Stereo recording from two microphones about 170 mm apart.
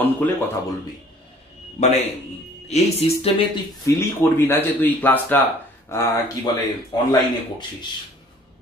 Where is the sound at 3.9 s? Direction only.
15° left (ahead or behind).